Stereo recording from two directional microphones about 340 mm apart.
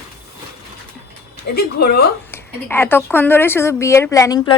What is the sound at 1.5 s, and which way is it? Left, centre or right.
Speech, left.